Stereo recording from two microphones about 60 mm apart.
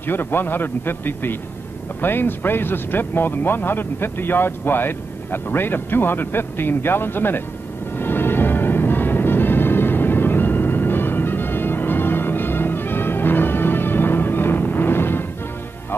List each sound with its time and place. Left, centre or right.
0.0 s speech: left
8.0 s music: left